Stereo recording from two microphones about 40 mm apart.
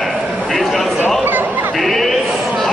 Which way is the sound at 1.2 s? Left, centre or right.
Right.